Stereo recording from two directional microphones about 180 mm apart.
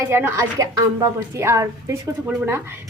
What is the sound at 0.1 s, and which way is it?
A woman's voice, 15° right (ahead or behind).